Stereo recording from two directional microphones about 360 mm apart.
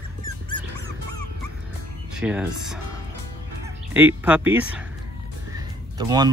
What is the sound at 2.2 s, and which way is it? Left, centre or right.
Speech, centre.